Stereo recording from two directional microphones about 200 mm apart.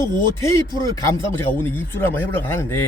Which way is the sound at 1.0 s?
10° left (ahead or behind).